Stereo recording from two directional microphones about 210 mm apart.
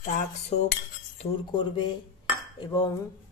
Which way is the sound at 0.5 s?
35° left (ahead or behind).